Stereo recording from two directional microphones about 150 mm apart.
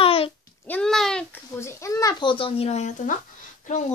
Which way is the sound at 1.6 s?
20° left (ahead or behind).